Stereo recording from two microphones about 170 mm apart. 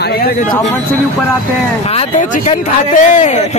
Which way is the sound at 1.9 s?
40° left (ahead or behind).